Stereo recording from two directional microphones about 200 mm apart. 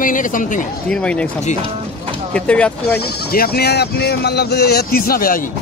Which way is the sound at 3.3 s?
50° left (ahead or behind).